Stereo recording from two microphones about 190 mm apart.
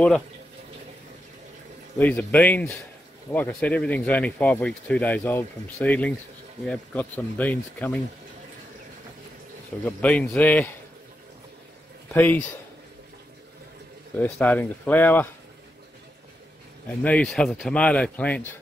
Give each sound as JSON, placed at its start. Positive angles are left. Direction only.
{"t": 2.0, "sound": "speech", "side_deg": 10}
{"t": 9.8, "sound": "speech", "side_deg": 5}
{"t": 12.1, "sound": "speech", "side_deg": 10}
{"t": 14.1, "sound": "speech", "side_deg": 10}
{"t": 17.0, "sound": "speech", "side_deg": 5}